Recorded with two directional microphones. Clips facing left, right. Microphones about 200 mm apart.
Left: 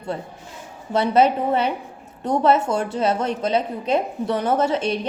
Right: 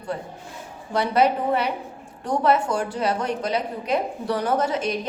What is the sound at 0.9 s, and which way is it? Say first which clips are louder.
A woman's voice: left 3 dB; 25° left (ahead or behind).